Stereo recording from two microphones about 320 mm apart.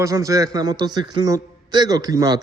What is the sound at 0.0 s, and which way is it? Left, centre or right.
A man's voice, centre.